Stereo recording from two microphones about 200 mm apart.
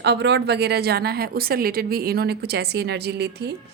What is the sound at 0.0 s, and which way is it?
A woman's voice, 60° right (ahead or behind).